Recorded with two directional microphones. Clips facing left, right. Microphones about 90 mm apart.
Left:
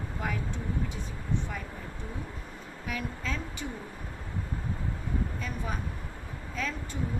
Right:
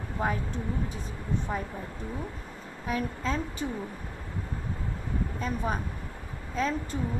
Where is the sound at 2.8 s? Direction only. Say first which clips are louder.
Right 5 dB; 35° right (ahead or behind).